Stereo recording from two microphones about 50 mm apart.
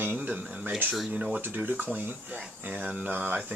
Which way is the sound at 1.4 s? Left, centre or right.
Right.